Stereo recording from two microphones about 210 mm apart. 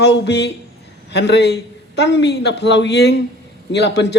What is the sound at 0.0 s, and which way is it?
A man's voice, 55° left (ahead or behind).